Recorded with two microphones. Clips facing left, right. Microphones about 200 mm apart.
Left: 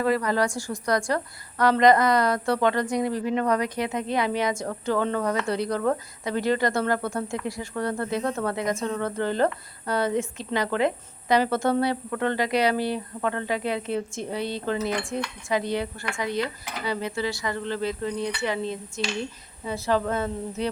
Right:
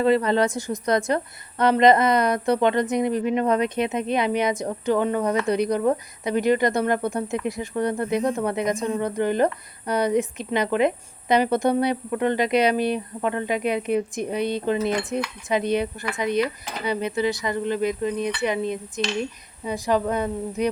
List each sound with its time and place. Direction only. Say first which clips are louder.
0.0 s a woman's voice: right 4 dB; 25° right (ahead or behind)